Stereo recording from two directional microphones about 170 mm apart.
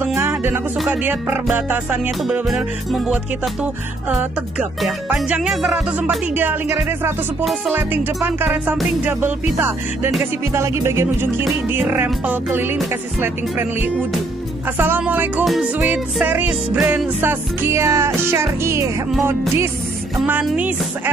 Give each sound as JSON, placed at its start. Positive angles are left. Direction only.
{"t": 0.0, "sound": "music", "side_deg": -10}
{"t": 7.9, "sound": "music", "side_deg": -10}
{"t": 14.8, "sound": "music", "side_deg": -10}
{"t": 20.4, "sound": "music", "side_deg": -10}